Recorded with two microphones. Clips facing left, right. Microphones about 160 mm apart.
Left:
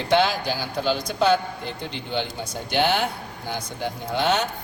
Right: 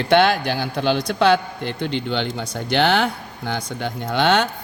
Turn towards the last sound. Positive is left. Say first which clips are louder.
# right 4 dB
turn(degrees=-80)